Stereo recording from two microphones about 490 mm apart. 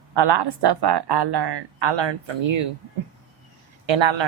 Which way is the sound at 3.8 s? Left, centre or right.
Right.